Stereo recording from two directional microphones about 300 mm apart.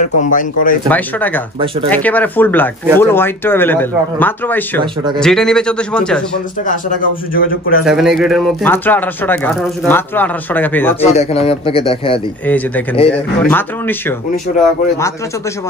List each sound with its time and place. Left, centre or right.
0.0 s speech: left
0.8 s speech: centre
6.6 s speech: left
7.8 s speech: centre
11.1 s speech: left
12.4 s speech: centre